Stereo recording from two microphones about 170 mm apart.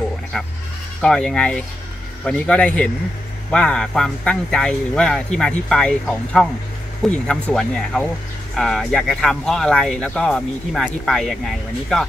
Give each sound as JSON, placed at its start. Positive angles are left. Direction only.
{"t": 1.0, "sound": "speech", "side_deg": 5}